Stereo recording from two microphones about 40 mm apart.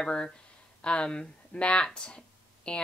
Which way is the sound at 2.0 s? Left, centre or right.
Left.